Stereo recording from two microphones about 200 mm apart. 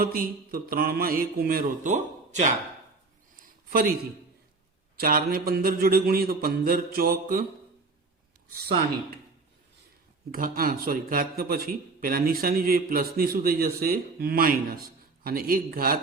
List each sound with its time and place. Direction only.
0.0 s a man's voice: 45° right (ahead or behind)
3.4 s a sound: 45° right (ahead or behind)
4.9 s a man's voice: 45° right (ahead or behind)
8.4 s a man's voice: 50° right (ahead or behind)
10.3 s a man's voice: 45° right (ahead or behind)